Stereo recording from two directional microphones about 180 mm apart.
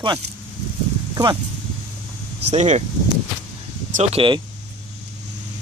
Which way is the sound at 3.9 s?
35° right (ahead or behind).